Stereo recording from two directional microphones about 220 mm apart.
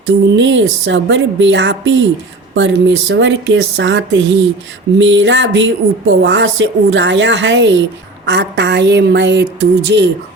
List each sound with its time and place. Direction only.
0.3 s a woman's voice: 55° right (ahead or behind)